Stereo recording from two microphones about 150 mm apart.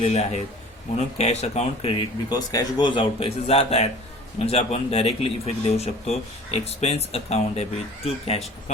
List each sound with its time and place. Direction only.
0.0 s speech: 45° left (ahead or behind)